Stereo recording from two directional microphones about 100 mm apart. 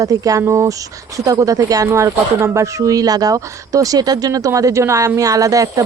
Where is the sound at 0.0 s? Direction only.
35° right (ahead or behind).